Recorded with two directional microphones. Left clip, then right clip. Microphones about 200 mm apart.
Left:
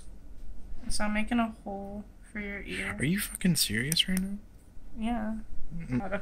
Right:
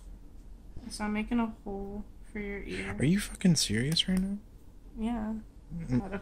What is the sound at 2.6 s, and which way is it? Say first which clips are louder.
Speech: even; 20° right (ahead or behind).